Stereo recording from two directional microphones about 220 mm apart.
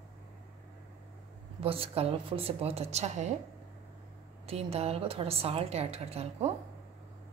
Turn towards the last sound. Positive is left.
turn(degrees=-30)  # may be behind; listen again after turning